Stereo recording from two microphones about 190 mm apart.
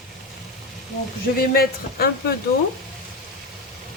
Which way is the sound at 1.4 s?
50° left (ahead or behind).